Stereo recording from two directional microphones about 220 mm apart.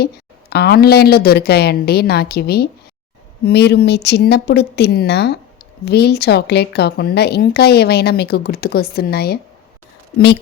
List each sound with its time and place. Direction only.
0.5 s speech: 45° left (ahead or behind)